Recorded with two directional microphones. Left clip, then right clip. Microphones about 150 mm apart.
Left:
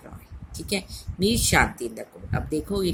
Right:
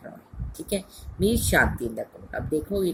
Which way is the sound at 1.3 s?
55° left (ahead or behind).